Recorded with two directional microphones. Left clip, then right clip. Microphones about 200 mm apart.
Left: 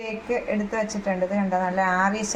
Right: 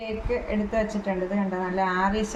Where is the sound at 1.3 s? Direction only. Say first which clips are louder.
Left 4 dB; 25° left (ahead or behind).